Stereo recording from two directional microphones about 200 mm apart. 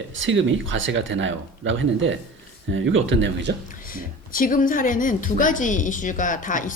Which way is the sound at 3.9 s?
45° left (ahead or behind).